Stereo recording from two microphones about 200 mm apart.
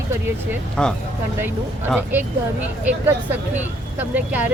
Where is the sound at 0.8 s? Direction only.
5° left (ahead or behind).